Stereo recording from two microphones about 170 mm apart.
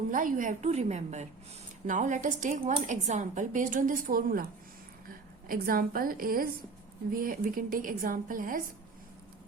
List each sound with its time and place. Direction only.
0.1 s a woman's voice: 50° right (ahead or behind)